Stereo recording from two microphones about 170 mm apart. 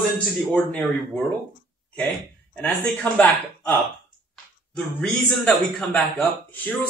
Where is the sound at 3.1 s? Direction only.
10° left (ahead or behind).